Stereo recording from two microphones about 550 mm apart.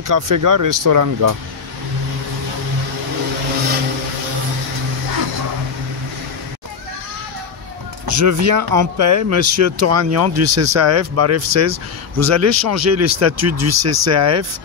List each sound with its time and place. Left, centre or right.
0.1 s speech: right
8.1 s speech: right